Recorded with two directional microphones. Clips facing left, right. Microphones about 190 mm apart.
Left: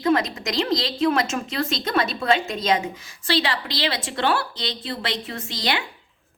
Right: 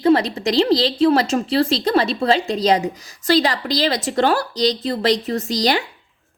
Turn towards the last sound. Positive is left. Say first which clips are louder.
# right 8 dB
turn(degrees=-40)  # may be behind; listen again after turning